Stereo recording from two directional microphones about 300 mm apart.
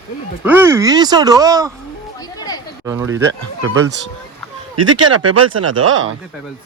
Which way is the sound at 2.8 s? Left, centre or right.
Centre.